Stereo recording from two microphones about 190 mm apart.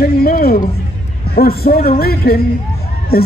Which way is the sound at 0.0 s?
50° left (ahead or behind).